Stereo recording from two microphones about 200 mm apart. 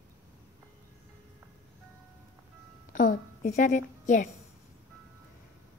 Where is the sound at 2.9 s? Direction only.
40° left (ahead or behind).